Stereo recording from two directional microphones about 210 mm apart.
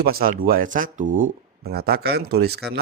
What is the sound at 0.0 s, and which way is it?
A man's voice, 45° right (ahead or behind).